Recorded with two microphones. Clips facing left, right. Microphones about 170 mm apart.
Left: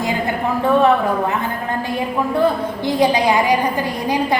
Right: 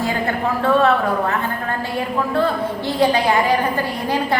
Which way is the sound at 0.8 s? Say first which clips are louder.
Left 2 dB; 15° left (ahead or behind).